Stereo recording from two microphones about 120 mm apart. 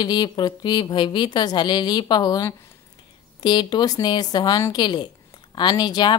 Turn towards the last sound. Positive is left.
turn(degrees=35)  # may be behind; listen again after turning